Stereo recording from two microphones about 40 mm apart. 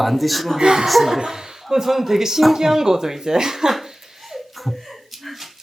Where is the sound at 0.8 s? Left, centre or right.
Centre.